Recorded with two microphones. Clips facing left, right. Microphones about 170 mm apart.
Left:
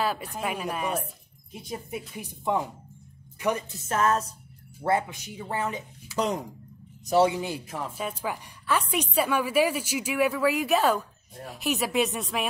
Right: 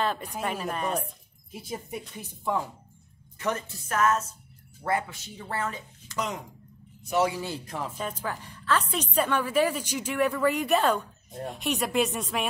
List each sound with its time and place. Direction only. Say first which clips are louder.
0.0 s speech: even; 5° left (ahead or behind)
2.1 s a woman's voice: left 2 dB; 20° left (ahead or behind)
3.9 s music: left 1 dB; 30° left (ahead or behind)
4.8 s a woman's voice: left 3 dB; 20° left (ahead or behind)
6.1 s music: left 5 dB; 35° left (ahead or behind)
7.1 s speech: left 4 dB; 25° left (ahead or behind)
7.6 s a woman's voice: even; 5° left (ahead or behind)